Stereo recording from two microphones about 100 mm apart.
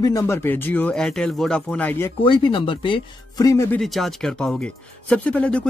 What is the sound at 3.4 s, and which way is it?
Speech, 30° left (ahead or behind).